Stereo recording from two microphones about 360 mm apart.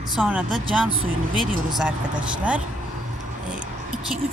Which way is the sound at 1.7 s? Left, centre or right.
Centre.